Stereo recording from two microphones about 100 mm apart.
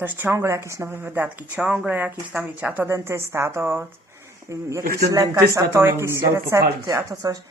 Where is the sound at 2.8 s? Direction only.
25° right (ahead or behind).